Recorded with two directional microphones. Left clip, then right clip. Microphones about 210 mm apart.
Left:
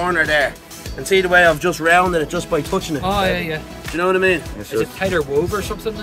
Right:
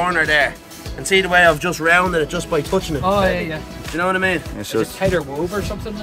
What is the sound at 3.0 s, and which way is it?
Speech, 45° left (ahead or behind).